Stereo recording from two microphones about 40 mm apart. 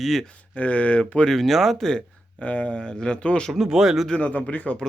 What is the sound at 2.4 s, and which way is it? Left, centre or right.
Speech, left.